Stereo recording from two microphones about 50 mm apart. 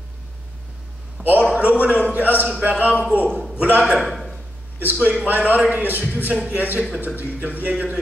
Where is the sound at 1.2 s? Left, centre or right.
Left.